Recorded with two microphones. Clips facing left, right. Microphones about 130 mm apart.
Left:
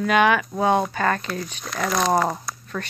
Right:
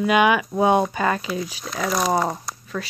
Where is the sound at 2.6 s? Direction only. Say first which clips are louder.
Right 3 dB; 5° right (ahead or behind).